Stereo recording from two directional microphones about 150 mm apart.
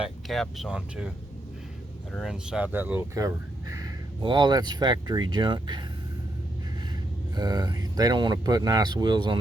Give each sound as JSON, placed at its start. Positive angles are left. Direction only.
{"t": 0.0, "sound": "speech", "side_deg": 0}
{"t": 2.1, "sound": "speech", "side_deg": -5}
{"t": 7.3, "sound": "speech", "side_deg": -30}